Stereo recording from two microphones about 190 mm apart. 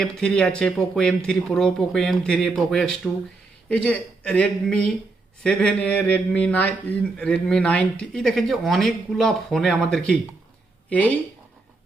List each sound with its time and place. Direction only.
0.0 s speech: 5° left (ahead or behind)